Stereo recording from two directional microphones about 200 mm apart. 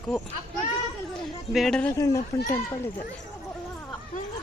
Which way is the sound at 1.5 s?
Centre (ahead or behind).